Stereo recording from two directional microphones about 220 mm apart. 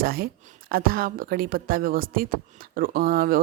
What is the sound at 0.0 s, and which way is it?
Speech, 40° right (ahead or behind).